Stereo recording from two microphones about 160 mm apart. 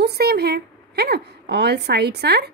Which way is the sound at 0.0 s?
90° right.